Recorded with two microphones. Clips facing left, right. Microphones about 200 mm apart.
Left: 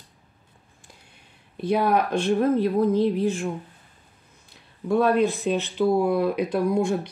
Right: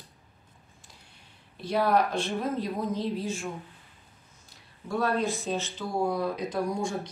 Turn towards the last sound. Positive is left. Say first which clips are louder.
# left 8 dB
turn(degrees=60)  # may be behind; listen again after turning